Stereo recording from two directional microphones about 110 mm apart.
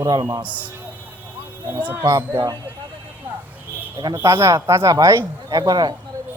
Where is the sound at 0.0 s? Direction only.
35° right (ahead or behind).